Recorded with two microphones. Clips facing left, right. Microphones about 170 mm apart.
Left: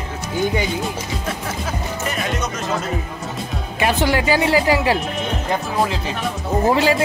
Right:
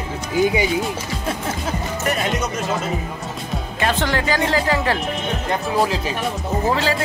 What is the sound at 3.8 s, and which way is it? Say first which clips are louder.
Speech: left 3 dB; 10° left (ahead or behind).